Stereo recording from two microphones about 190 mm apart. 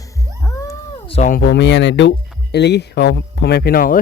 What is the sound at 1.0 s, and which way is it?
Speech, 30° left (ahead or behind).